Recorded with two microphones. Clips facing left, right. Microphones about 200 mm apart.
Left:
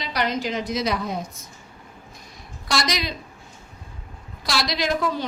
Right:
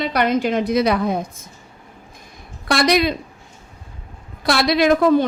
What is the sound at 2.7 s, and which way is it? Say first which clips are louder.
Speech: right 9 dB; 60° right (ahead or behind).